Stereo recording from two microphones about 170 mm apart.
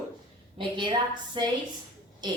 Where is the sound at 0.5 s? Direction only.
30° right (ahead or behind).